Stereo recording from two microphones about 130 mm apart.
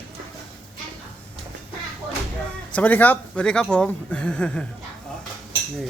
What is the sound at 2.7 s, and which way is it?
Speech, 10° left (ahead or behind).